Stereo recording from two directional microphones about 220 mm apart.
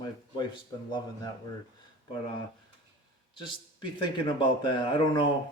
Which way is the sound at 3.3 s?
20° left (ahead or behind).